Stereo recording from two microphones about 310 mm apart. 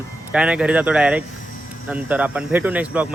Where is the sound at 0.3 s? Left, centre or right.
Centre.